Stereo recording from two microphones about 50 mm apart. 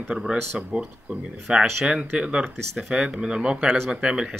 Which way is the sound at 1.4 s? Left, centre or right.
Centre.